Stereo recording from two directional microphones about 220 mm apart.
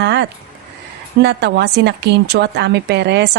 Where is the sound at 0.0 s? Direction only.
50° right (ahead or behind).